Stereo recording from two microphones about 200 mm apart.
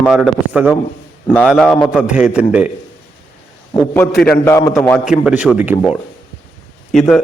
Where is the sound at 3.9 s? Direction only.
5° left (ahead or behind).